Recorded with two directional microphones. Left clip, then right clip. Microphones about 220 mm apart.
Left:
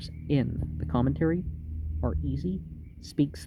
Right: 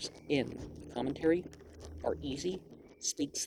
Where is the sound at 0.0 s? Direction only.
25° left (ahead or behind).